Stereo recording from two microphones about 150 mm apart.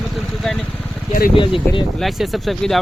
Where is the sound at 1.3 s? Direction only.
35° left (ahead or behind).